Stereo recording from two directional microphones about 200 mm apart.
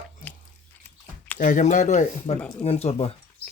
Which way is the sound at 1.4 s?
40° left (ahead or behind).